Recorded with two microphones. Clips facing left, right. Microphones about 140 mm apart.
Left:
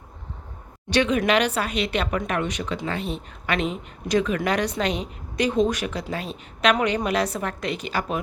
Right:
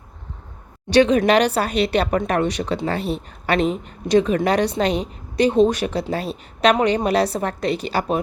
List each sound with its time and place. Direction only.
0.9 s speech: 35° right (ahead or behind)